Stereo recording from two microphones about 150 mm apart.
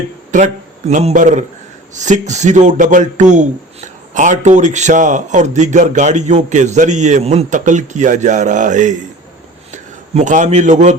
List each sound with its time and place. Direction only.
0.3 s a man's voice: 55° right (ahead or behind)